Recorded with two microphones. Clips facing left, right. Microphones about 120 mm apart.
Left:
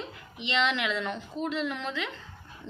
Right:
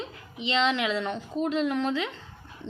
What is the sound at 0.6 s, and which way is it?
Speech, 35° right (ahead or behind).